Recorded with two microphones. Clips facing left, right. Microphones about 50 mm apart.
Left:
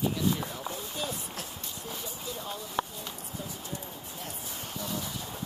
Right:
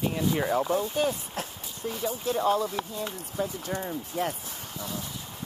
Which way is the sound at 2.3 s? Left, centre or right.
Right.